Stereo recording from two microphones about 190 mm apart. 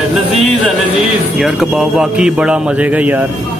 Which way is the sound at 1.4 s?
Centre (ahead or behind).